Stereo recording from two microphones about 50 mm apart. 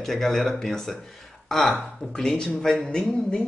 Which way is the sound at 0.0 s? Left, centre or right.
Centre.